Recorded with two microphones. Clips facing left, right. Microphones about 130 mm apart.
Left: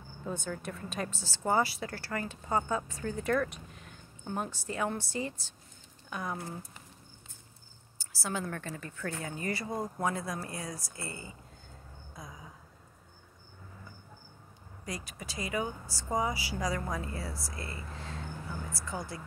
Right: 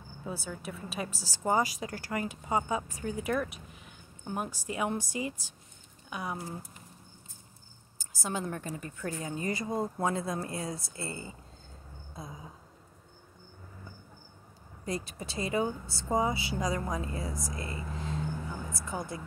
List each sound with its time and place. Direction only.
0.2 s speech: 5° right (ahead or behind)
8.0 s a woman's voice: 20° right (ahead or behind)
12.2 s a sound: 25° right (ahead or behind)
14.9 s a woman's voice: 30° right (ahead or behind)